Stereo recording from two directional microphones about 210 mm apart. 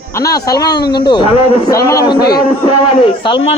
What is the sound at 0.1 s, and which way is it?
A man's voice, 15° left (ahead or behind).